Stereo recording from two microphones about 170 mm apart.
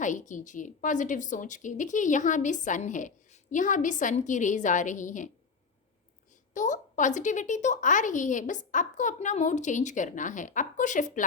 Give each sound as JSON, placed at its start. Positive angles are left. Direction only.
{"t": 0.0, "sound": "a woman's voice", "side_deg": 50}
{"t": 6.5, "sound": "a woman's voice", "side_deg": 45}